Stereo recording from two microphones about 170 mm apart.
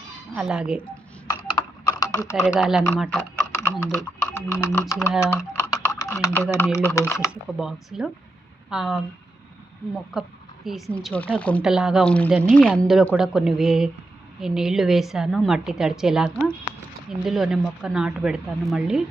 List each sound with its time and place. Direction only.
0.3 s speech: 5° right (ahead or behind)
1.3 s typing: 20° left (ahead or behind)
2.3 s speech: 5° right (ahead or behind)
3.5 s typing: 10° left (ahead or behind)
3.8 s speech: 10° left (ahead or behind)
5.2 s typing: 15° left (ahead or behind)
6.2 s a woman's voice: 15° left (ahead or behind)
7.6 s a woman's voice: 5° right (ahead or behind)
11.6 s a woman's voice: 5° right (ahead or behind)